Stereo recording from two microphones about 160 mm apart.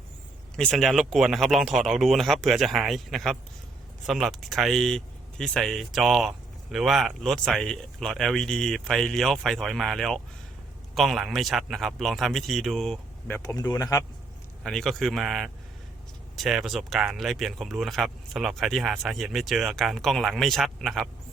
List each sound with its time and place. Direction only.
0.5 s speech: 5° left (ahead or behind)
13.3 s speech: 20° left (ahead or behind)
14.6 s speech: centre (ahead or behind)